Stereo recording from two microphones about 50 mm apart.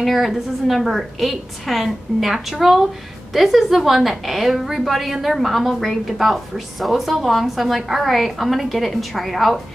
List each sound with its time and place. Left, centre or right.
0.0 s a woman's voice: centre